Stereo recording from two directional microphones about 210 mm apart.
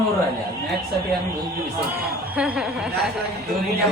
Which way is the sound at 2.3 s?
5° right (ahead or behind).